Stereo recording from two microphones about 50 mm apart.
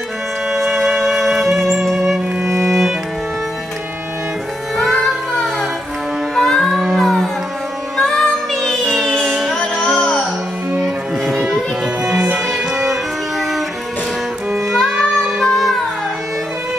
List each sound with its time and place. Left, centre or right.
0.5 s music: centre
4.7 s music: centre
9.6 s music: centre
10.8 s music: centre
12.0 s music: centre
14.7 s music: centre